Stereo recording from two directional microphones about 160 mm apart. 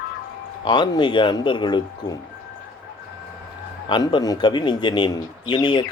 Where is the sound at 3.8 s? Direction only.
30° left (ahead or behind).